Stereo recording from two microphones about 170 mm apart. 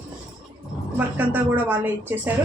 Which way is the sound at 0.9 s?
10° right (ahead or behind).